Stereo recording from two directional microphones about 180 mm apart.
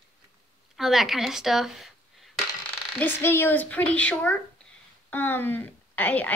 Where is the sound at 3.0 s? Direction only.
10° left (ahead or behind).